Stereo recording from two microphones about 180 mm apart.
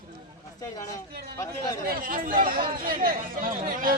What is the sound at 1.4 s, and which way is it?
Speech, 15° left (ahead or behind).